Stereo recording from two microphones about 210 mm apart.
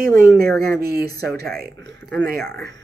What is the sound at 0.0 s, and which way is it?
Speech, 40° right (ahead or behind).